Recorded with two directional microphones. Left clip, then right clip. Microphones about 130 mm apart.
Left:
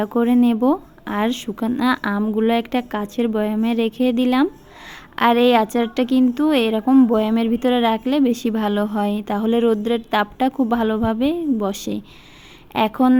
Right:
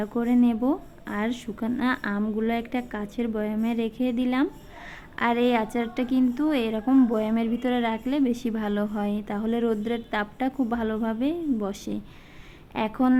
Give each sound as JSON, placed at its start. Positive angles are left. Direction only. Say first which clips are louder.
{"t": 0.0, "sound": "speech", "louder": "left 6 dB", "side_deg": 40}
{"t": 6.9, "sound": "speech", "louder": "left 6 dB", "side_deg": 25}
{"t": 7.2, "sound": "speech", "louder": "left 7 dB", "side_deg": 40}